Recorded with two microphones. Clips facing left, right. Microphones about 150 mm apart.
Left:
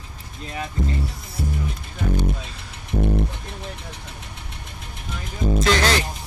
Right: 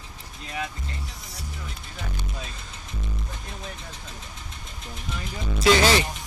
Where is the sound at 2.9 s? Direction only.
60° left (ahead or behind).